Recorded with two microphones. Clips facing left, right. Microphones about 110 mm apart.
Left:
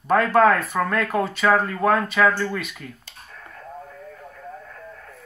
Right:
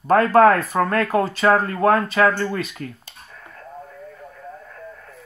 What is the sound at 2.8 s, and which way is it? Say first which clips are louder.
Speech: right 6 dB; 60° right (ahead or behind).